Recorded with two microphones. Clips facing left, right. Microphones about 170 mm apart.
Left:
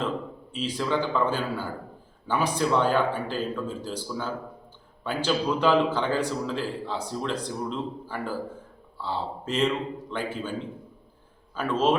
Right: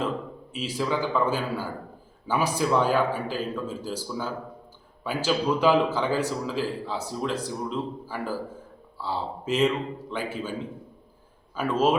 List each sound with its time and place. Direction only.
0.5 s a man's voice: 5° right (ahead or behind)
11.5 s a man's voice: 10° right (ahead or behind)